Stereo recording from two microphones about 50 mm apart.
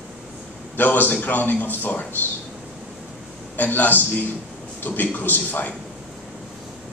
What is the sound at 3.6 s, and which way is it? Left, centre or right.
A man's voice, left.